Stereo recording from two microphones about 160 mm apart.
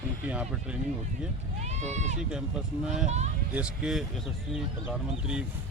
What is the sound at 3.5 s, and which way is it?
A man's voice, 5° right (ahead or behind).